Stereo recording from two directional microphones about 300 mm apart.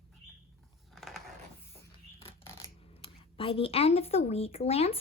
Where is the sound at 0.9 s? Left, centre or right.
Centre.